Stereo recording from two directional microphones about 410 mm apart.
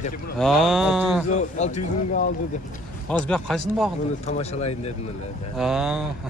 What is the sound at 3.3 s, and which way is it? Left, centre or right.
Speech, centre.